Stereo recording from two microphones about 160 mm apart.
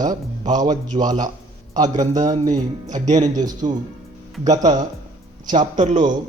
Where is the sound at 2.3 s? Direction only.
45° right (ahead or behind).